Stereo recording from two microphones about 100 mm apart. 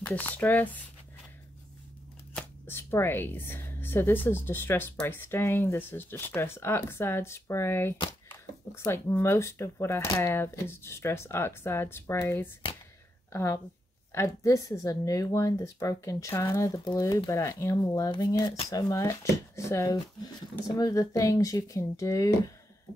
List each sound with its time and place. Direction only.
0.0 s speech: 15° left (ahead or behind)
2.3 s speech: 20° left (ahead or behind)
20.6 s speech: 40° left (ahead or behind)